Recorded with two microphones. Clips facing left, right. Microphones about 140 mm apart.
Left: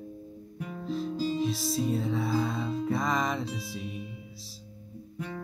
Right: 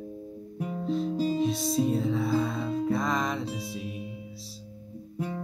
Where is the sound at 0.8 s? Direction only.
Centre (ahead or behind).